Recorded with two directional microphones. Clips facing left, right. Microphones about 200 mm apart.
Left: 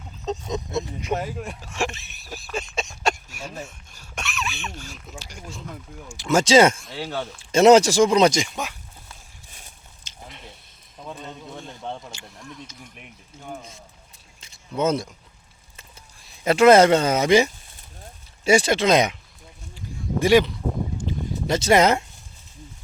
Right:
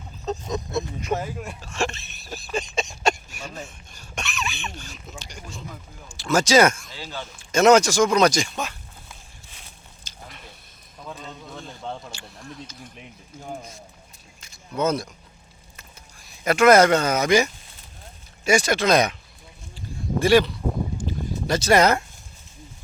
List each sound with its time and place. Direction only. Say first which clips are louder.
0.5 s speech: even; 20° left (ahead or behind)
6.1 s speech: left 2 dB; 25° left (ahead or behind)
6.9 s speech: left 6 dB; 65° left (ahead or behind)
7.5 s speech: left 2 dB; 30° left (ahead or behind)
10.0 s a sound: left 1 dB; 25° left (ahead or behind)
11.0 s a man's voice: left 1 dB; 25° left (ahead or behind)
13.4 s speech: right 1 dB; 10° right (ahead or behind)
14.4 s a sound: left 1 dB; 25° left (ahead or behind)
16.2 s speech: left 2 dB; 25° left (ahead or behind)
20.1 s speech: even; 20° left (ahead or behind)
21.1 s a sound: left 1 dB; 20° left (ahead or behind)